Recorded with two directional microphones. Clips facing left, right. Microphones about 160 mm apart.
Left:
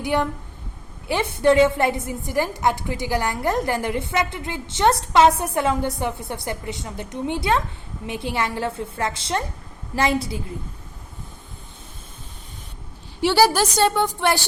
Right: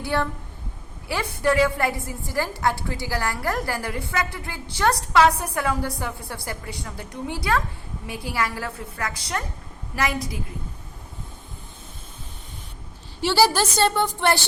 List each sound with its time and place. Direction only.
0.0 s a woman's voice: 15° left (ahead or behind)
13.2 s a woman's voice: 15° left (ahead or behind)